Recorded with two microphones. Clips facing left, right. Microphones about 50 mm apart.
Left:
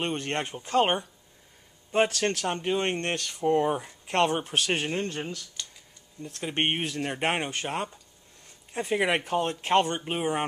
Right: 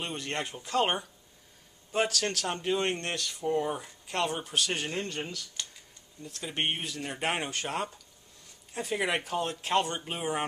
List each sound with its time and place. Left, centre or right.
0.0 s speech: left
2.4 s speech: left
3.2 s speech: left
6.2 s speech: left
7.3 s speech: centre